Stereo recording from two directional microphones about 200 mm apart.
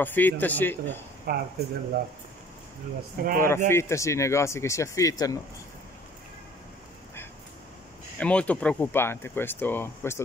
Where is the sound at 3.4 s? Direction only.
10° left (ahead or behind).